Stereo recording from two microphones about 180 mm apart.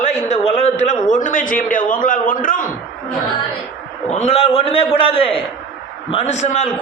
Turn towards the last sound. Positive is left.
turn(degrees=40)  # may be behind; listen again after turning